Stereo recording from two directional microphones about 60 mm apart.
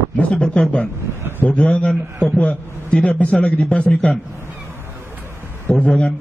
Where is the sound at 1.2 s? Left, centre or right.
Right.